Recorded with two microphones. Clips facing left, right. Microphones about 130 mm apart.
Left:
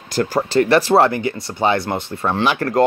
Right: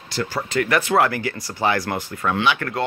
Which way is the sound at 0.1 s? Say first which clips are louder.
Left 7 dB; 45° left (ahead or behind).